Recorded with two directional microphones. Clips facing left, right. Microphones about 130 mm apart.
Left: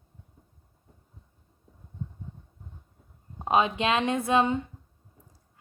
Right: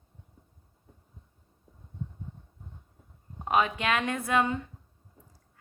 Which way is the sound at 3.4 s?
20° left (ahead or behind).